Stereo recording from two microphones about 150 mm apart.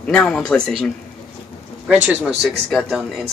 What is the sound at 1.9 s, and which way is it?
Speech, 10° right (ahead or behind).